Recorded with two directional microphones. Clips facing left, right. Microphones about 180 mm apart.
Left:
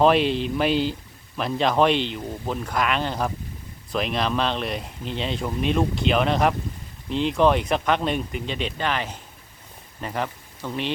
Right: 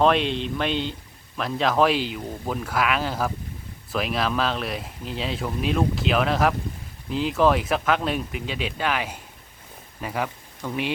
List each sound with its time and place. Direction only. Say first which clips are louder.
0.0 s speech: left 2 dB; 5° left (ahead or behind)